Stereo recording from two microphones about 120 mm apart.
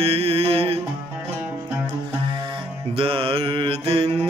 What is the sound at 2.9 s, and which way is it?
Mantra, 50° right (ahead or behind).